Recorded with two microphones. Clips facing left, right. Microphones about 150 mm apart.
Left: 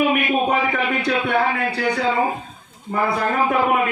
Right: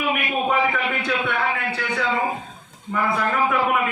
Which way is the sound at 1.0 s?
40° left (ahead or behind).